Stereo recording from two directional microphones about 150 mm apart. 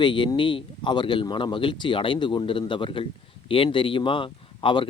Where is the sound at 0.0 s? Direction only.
30° left (ahead or behind).